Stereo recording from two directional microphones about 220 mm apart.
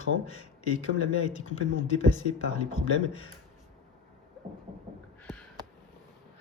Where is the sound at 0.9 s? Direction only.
75° left (ahead or behind).